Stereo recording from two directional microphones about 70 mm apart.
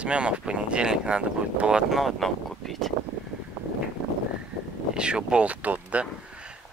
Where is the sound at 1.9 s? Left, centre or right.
Centre.